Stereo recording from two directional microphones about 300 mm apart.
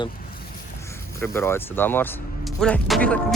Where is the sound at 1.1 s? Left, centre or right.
Centre.